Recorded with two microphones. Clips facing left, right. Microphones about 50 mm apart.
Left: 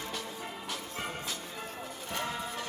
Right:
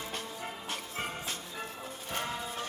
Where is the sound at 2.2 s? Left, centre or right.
Left.